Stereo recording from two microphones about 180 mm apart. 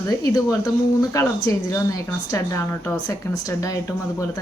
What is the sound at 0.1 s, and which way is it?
Speech, 20° left (ahead or behind).